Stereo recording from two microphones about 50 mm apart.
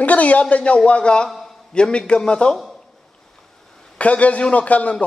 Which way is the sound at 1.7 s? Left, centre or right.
Centre.